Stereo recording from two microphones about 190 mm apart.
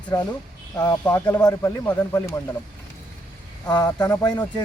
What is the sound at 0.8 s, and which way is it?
Speech, 15° left (ahead or behind).